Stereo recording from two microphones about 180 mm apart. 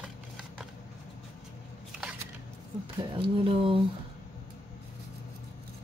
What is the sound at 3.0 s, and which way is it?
Speech, 30° right (ahead or behind).